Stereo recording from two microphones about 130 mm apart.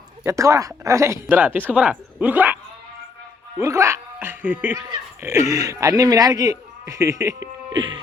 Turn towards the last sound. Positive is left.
turn(degrees=-20)  # may be behind; listen again after turning